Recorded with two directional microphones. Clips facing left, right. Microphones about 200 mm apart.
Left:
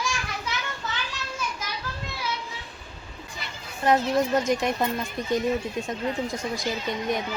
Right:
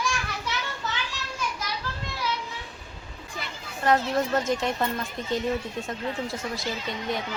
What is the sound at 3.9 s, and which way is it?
Speech, 15° left (ahead or behind).